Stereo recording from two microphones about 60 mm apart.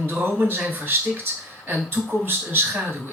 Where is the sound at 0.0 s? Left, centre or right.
Right.